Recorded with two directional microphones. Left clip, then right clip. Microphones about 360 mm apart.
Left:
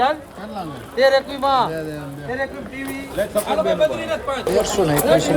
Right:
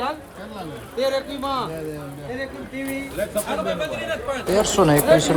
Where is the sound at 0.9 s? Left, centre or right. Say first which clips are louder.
Left 7 dB; centre.